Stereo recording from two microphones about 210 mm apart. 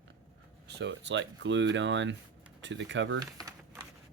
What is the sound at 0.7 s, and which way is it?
Speech, 55° right (ahead or behind).